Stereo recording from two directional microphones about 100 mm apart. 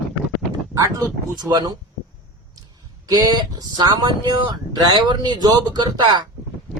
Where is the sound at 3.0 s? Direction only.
40° right (ahead or behind).